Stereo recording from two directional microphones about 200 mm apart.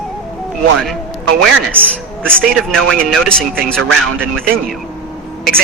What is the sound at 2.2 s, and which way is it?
A man's voice, 5° left (ahead or behind).